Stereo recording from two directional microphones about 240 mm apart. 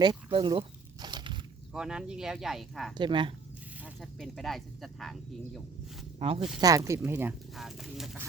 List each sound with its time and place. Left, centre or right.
0.0 s speech: centre
1.0 s a sound: centre
1.7 s speech: centre
3.0 s speech: centre
3.8 s speech: centre
6.1 s speech: right; by 8.2 s centre